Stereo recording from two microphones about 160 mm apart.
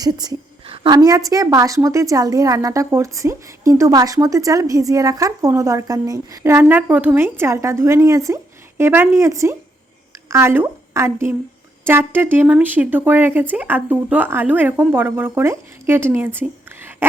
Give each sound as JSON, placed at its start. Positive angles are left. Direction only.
{"t": 0.0, "sound": "a woman's voice", "side_deg": -25}